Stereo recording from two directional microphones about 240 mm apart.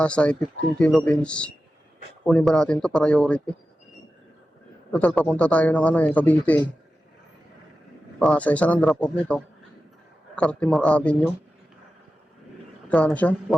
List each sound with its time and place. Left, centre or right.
0.0 s speech: centre
4.9 s speech: centre
8.2 s speech: centre
12.9 s speech: centre